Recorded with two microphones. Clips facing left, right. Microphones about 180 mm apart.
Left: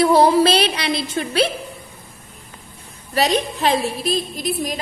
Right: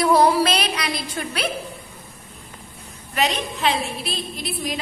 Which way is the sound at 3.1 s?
35° left (ahead or behind).